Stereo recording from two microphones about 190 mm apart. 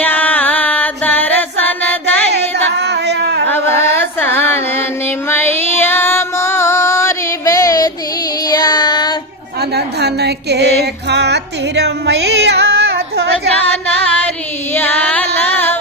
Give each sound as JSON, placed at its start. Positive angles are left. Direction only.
{"t": 0.0, "sound": "music", "side_deg": 10}
{"t": 2.6, "sound": "a sound", "side_deg": -65}
{"t": 3.4, "sound": "carnatic music", "side_deg": 10}
{"t": 5.3, "sound": "music", "side_deg": 10}
{"t": 8.4, "sound": "child singing", "side_deg": 20}
{"t": 9.7, "sound": "music", "side_deg": -60}
{"t": 14.7, "sound": "music", "side_deg": 10}